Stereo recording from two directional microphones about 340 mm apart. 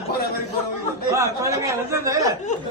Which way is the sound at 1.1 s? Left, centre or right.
Centre.